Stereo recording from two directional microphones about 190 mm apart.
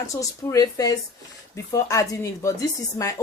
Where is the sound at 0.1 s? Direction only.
15° left (ahead or behind).